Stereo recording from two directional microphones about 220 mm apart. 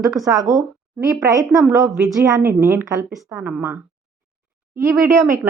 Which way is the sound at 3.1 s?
Centre (ahead or behind).